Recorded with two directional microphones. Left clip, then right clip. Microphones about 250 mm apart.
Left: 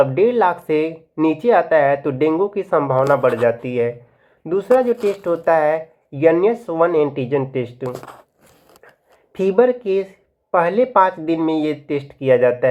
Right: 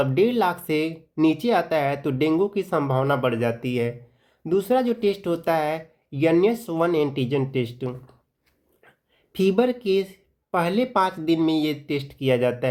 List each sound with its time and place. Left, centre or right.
0.0 s speech: right
9.5 s speech: right